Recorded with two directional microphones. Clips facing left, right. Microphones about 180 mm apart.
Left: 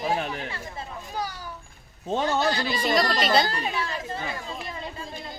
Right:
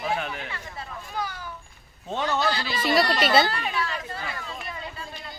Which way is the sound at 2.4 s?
45° left (ahead or behind).